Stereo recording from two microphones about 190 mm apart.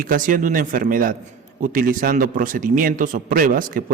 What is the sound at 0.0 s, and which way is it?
A man's voice, 45° right (ahead or behind).